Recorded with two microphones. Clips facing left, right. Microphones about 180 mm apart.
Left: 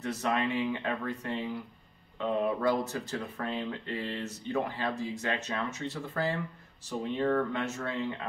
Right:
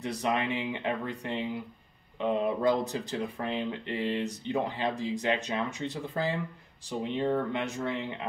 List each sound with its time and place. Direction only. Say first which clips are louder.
0.0 s speech: right 1 dB; 15° right (ahead or behind)